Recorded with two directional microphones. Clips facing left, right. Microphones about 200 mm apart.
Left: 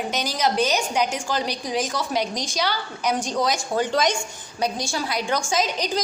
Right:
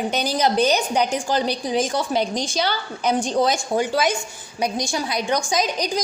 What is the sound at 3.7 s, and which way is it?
A woman's voice, 10° right (ahead or behind).